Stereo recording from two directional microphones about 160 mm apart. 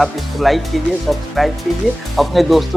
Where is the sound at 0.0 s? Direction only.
Centre (ahead or behind).